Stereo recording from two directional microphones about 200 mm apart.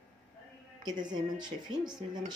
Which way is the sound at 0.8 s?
20° right (ahead or behind).